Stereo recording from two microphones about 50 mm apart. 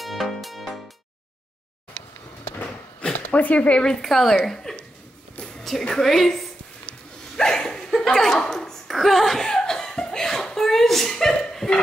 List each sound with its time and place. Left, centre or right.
0.0 s music: centre
3.0 s speech: left
4.1 s a woman's voice: centre
4.7 s a sound: centre
5.6 s a woman's voice: centre
7.3 s a sound: centre
7.9 s chuckle: centre